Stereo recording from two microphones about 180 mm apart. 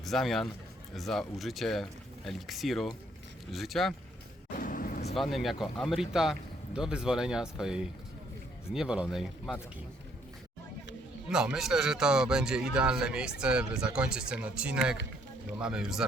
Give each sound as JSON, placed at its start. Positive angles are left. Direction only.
{"t": 0.0, "sound": "speech", "side_deg": 0}
{"t": 4.5, "sound": "vehicle", "side_deg": 50}
{"t": 5.1, "sound": "speech", "side_deg": 0}
{"t": 11.3, "sound": "speech", "side_deg": -5}